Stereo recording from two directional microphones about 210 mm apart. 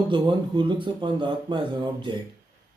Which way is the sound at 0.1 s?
20° right (ahead or behind).